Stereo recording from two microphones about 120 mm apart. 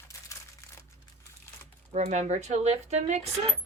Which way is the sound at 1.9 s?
70° right (ahead or behind).